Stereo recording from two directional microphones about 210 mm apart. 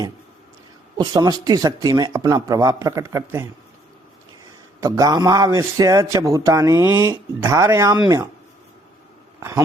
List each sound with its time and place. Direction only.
0.9 s a man's voice: 20° right (ahead or behind)